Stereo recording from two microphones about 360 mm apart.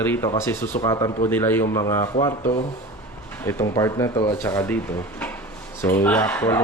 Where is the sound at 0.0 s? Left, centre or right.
Centre.